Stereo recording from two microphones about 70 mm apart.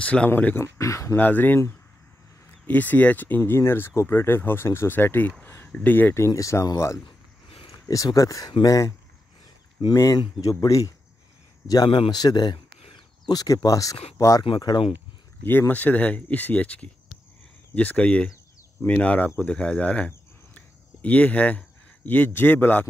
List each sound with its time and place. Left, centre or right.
0.0 s speech: centre
0.6 s speech: left
1.1 s speech: left
2.6 s speech: left
6.1 s speech: left
10.1 s speech: left
11.6 s speech: left
13.3 s speech: left
15.7 s speech: left